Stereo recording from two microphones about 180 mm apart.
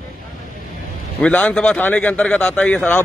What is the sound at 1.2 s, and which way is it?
A man's voice, 5° left (ahead or behind).